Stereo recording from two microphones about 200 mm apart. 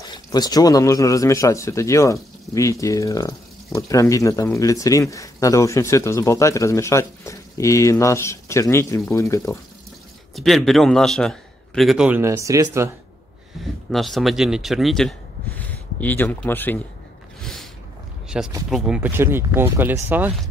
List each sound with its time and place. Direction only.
0.0 s speech: 20° left (ahead or behind)
10.3 s a man's voice: centre (ahead or behind); by 12.9 s 15° right (ahead or behind)
13.8 s speech: centre (ahead or behind)
17.4 s a sound: 5° left (ahead or behind)
18.3 s a man's voice: 5° right (ahead or behind)